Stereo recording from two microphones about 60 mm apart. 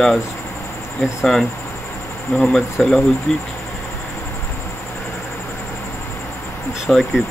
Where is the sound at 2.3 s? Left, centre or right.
Centre.